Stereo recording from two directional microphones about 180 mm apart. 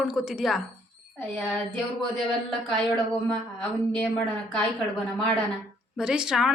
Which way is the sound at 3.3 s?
5° left (ahead or behind).